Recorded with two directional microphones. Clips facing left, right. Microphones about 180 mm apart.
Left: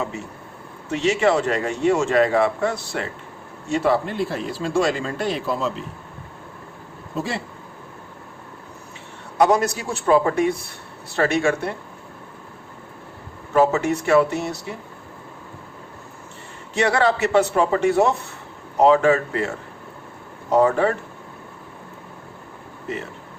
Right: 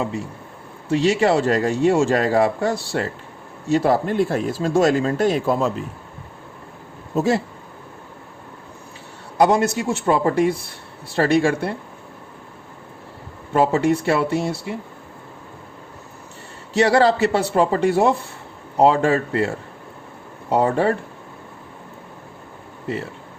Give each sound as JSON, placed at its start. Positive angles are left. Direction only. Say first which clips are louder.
{"t": 0.9, "sound": "a man's voice", "louder": "right 2 dB", "side_deg": -35}
{"t": 7.2, "sound": "speech", "louder": "right 8 dB", "side_deg": -45}
{"t": 9.4, "sound": "a man's voice", "louder": "right 1 dB", "side_deg": -25}
{"t": 13.5, "sound": "a man's voice", "louder": "right 1 dB", "side_deg": -30}
{"t": 16.7, "sound": "a man's voice", "louder": "right 4 dB", "side_deg": -30}